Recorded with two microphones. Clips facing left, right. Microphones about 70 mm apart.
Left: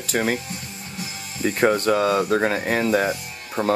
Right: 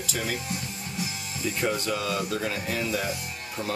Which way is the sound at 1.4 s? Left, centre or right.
Left.